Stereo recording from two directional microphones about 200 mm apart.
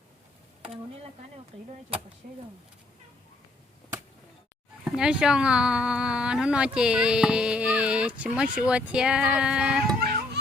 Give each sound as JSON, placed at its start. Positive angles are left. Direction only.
{"t": 1.5, "sound": "speech", "side_deg": -30}
{"t": 2.2, "sound": "speech", "side_deg": -40}
{"t": 4.9, "sound": "speech", "side_deg": -5}